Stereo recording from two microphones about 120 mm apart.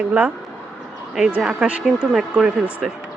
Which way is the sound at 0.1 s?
15° right (ahead or behind).